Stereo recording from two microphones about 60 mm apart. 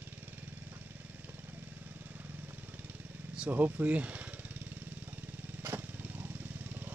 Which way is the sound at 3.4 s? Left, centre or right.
Right.